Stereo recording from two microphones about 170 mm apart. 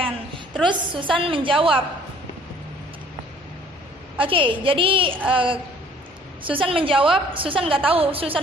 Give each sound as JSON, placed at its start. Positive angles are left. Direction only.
{"t": 0.7, "sound": "a woman's voice", "side_deg": -30}
{"t": 4.2, "sound": "a woman's voice", "side_deg": -30}